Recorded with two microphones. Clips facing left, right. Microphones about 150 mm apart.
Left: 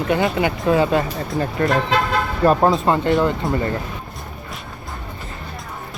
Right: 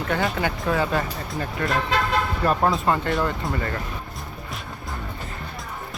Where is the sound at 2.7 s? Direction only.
20° left (ahead or behind).